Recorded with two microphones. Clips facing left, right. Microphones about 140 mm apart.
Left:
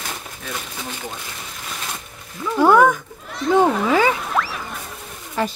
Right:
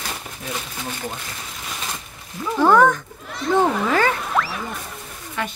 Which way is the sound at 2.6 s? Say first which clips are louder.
Left 1 dB; 10° left (ahead or behind).